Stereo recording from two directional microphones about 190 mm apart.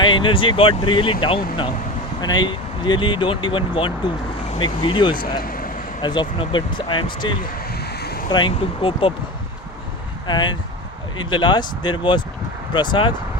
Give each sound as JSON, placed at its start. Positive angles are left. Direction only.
{"t": 0.0, "sound": "speech", "side_deg": 25}
{"t": 5.4, "sound": "vehicle", "side_deg": 50}
{"t": 6.0, "sound": "speech", "side_deg": 25}
{"t": 7.7, "sound": "vehicle", "side_deg": 55}
{"t": 8.3, "sound": "speech", "side_deg": 25}
{"t": 10.2, "sound": "speech", "side_deg": 25}